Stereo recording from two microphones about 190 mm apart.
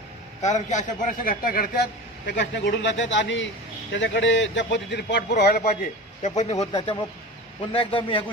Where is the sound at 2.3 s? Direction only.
65° left (ahead or behind).